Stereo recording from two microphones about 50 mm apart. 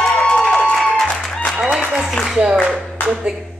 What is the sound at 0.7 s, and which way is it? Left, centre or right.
Music, centre.